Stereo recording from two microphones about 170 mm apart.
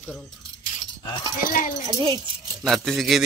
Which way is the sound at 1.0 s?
25° left (ahead or behind).